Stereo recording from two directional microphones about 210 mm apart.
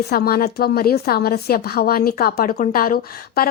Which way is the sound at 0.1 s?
45° left (ahead or behind).